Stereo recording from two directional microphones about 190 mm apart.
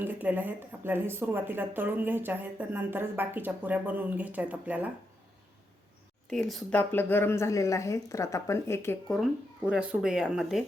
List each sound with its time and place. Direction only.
0.0 s speech: 10° right (ahead or behind)
6.3 s speech: centre (ahead or behind)
9.1 s speech: 5° right (ahead or behind)